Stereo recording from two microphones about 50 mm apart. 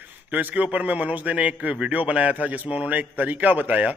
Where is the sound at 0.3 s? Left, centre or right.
Right.